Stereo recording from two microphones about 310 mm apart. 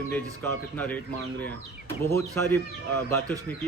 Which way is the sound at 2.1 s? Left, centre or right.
Centre.